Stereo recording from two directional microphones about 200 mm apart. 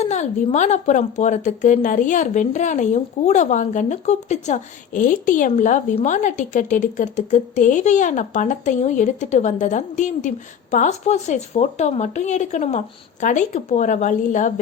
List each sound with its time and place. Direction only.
0.0 s a woman's voice: 35° left (ahead or behind)